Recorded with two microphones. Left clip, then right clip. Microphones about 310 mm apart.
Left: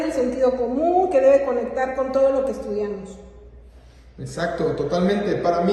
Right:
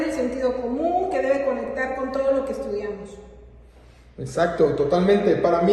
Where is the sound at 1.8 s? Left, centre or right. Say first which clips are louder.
Left 5 dB; centre.